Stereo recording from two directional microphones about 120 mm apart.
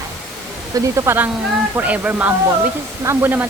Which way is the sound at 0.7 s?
25° right (ahead or behind).